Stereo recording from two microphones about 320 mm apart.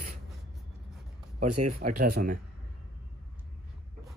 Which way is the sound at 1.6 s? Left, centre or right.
Right.